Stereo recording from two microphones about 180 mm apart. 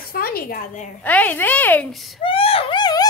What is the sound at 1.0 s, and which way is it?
A woman's voice, 10° left (ahead or behind).